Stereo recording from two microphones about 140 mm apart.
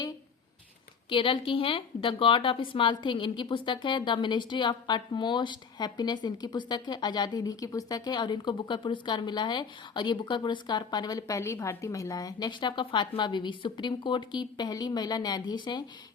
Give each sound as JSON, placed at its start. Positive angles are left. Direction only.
{"t": 1.1, "sound": "a woman's voice", "side_deg": 40}